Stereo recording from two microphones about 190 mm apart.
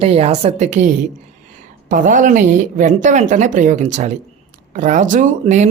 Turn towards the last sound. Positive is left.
turn(degrees=-40)  # may be behind; listen again after turning